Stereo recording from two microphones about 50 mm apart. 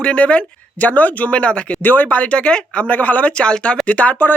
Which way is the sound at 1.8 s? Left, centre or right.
Left.